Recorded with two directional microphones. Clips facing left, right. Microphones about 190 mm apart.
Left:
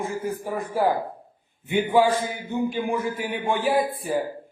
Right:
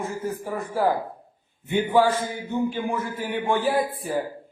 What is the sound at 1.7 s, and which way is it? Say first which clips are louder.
A man's voice: even; 15° left (ahead or behind).